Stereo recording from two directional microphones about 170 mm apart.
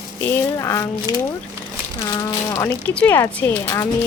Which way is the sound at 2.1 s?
20° left (ahead or behind).